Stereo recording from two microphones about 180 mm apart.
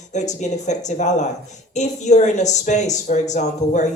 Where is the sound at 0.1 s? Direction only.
40° left (ahead or behind).